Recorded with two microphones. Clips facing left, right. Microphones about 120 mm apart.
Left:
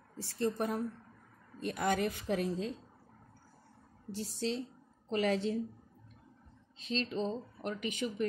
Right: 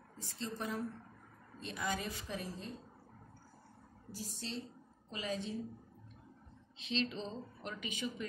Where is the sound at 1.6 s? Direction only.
55° left (ahead or behind); by 2.7 s 80° left.